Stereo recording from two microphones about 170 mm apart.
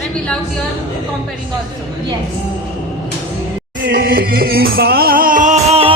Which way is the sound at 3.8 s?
75° right (ahead or behind).